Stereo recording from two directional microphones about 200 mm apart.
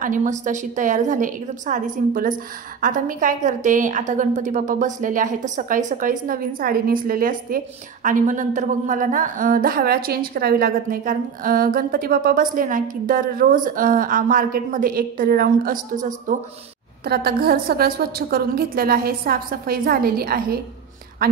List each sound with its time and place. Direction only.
0.0 s a woman's voice: 40° right (ahead or behind)
17.0 s a woman's voice: 50° right (ahead or behind)